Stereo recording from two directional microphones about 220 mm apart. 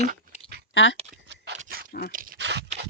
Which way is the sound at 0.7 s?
55° left (ahead or behind).